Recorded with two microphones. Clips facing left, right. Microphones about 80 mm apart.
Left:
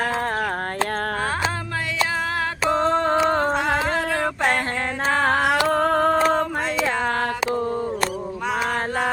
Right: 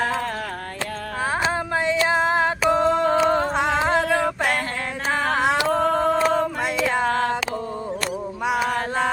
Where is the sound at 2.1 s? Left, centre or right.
Right.